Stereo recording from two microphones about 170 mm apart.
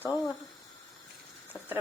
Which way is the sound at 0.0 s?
15° left (ahead or behind).